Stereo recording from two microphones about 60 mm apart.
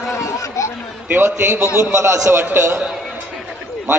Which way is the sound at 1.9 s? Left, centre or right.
Right.